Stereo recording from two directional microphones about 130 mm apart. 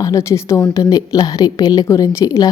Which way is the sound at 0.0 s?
25° left (ahead or behind).